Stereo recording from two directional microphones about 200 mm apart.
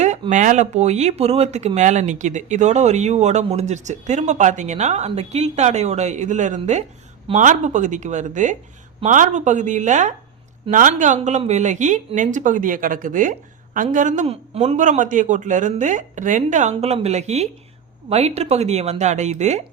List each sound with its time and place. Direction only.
0.0 s speech: 35° right (ahead or behind)